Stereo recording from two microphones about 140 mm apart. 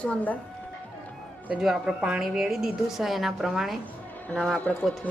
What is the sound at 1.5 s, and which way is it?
A woman's voice, 5° right (ahead or behind).